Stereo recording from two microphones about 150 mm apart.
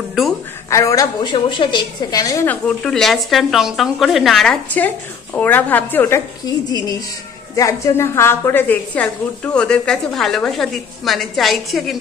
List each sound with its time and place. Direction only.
0.7 s a woman's voice: 20° left (ahead or behind)
1.3 s a woman's voice: 30° left (ahead or behind)
2.4 s speech: 10° left (ahead or behind)